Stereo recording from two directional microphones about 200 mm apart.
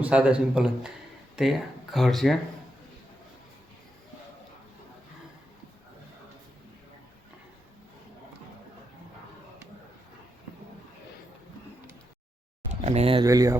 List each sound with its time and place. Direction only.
0.0 s speech: 5° right (ahead or behind)
12.8 s speech: 30° right (ahead or behind)
13.2 s speech: 15° right (ahead or behind)